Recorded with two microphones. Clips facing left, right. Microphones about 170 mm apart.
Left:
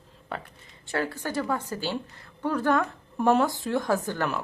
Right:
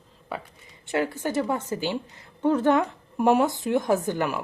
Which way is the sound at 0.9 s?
20° right (ahead or behind).